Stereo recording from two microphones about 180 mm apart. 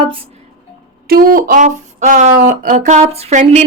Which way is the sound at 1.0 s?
55° right (ahead or behind).